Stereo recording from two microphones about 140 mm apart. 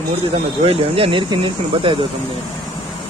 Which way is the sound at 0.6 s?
40° right (ahead or behind).